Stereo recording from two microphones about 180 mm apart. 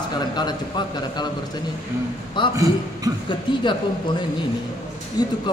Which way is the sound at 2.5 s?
20° right (ahead or behind).